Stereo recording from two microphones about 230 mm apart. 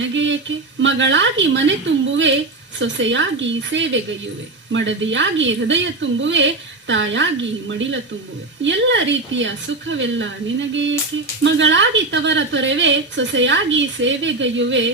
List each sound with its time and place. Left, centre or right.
0.0 s a woman's voice: right
2.7 s a woman's voice: right